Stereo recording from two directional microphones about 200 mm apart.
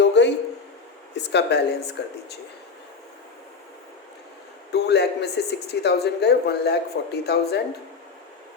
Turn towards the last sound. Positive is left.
turn(degrees=55)  # may be behind; listen again after turning